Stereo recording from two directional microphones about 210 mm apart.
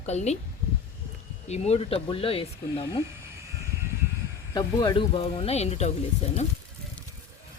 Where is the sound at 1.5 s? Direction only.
30° left (ahead or behind).